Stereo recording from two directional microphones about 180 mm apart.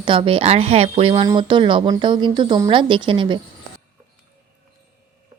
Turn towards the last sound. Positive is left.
turn(degrees=-25)  # may be behind; listen again after turning